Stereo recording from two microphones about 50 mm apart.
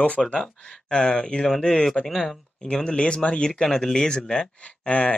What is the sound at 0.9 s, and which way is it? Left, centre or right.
Speech, centre.